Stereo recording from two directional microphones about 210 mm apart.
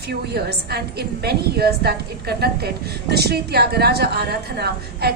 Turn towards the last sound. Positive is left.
turn(degrees=-50)  # may be behind; listen again after turning